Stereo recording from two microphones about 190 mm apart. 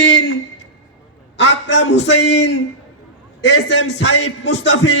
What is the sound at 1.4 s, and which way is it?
A man's voice, 65° left (ahead or behind).